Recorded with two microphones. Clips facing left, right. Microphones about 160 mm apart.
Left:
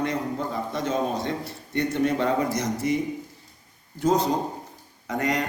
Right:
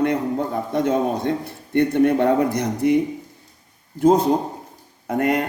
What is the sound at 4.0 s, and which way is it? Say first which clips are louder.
A man's voice: right 6 dB; 55° right (ahead or behind).